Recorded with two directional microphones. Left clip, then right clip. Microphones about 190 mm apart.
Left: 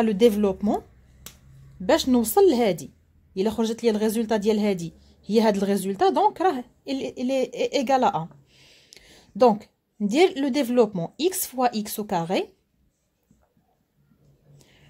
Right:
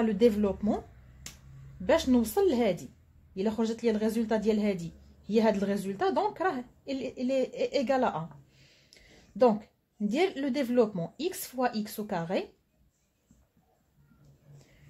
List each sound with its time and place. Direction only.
0.0 s speech: 40° left (ahead or behind)
1.9 s speech: 40° left (ahead or behind)